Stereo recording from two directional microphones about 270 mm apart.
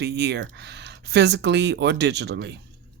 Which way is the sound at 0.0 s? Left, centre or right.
Right.